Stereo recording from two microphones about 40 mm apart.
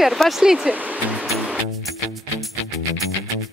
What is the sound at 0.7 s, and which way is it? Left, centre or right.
Speech, centre.